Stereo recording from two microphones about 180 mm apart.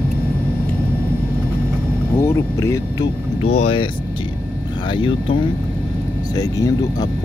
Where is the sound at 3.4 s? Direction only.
35° left (ahead or behind).